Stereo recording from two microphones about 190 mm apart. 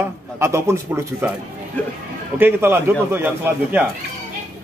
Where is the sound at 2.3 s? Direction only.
10° right (ahead or behind).